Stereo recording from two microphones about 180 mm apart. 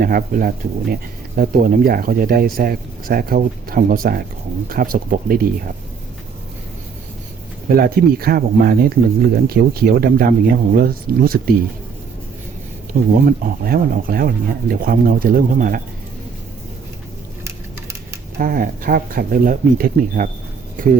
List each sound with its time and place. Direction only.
0.0 s speech: 50° right (ahead or behind)
7.7 s speech: 55° right (ahead or behind)
12.9 s speech: 60° right (ahead or behind)
18.3 s speech: 55° right (ahead or behind)